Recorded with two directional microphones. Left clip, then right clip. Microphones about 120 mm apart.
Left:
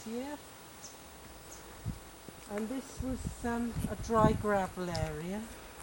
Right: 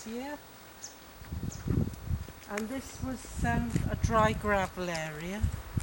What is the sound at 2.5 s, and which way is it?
Speech, 35° right (ahead or behind).